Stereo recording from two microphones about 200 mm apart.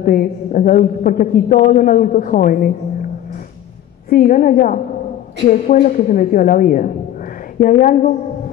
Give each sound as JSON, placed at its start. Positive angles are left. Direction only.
{"t": 0.0, "sound": "a woman's voice", "side_deg": 45}
{"t": 4.1, "sound": "a woman's voice", "side_deg": 40}